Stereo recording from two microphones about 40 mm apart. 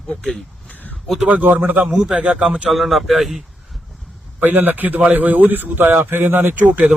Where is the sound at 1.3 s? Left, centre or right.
Right.